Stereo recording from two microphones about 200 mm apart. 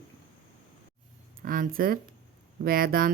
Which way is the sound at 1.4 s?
45° right (ahead or behind).